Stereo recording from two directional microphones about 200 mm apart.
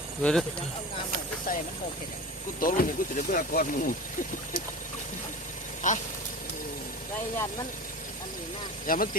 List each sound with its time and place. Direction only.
0.2 s speech: 5° left (ahead or behind)
1.5 s speech: 45° left (ahead or behind)
5.8 s speech: 40° left (ahead or behind)
8.9 s speech: 45° left (ahead or behind)